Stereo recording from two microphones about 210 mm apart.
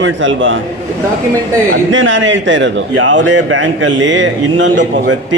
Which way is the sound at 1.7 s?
65° right (ahead or behind).